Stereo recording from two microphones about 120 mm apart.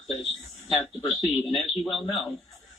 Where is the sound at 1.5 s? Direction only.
Centre (ahead or behind).